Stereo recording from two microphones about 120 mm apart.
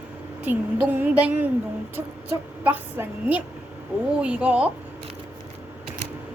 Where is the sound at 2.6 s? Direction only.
15° right (ahead or behind).